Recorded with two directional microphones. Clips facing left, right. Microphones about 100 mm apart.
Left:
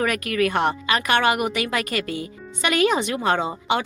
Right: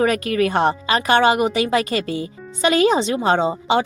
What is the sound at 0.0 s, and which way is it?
Speech, 30° right (ahead or behind).